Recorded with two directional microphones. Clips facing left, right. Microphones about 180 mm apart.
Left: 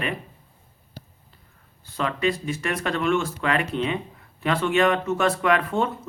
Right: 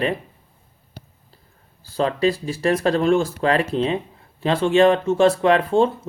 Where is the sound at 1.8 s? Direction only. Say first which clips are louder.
Right 5 dB; 35° right (ahead or behind).